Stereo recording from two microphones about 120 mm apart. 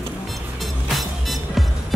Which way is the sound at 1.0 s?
Centre (ahead or behind).